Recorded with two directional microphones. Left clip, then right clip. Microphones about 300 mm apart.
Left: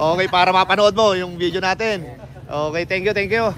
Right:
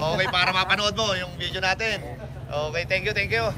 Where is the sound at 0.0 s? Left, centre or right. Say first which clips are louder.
Left 7 dB; centre.